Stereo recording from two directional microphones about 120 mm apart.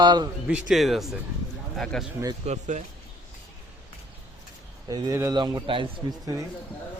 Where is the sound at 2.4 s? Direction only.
75° right (ahead or behind).